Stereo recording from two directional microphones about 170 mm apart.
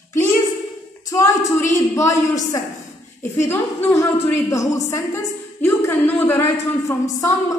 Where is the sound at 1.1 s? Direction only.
20° left (ahead or behind).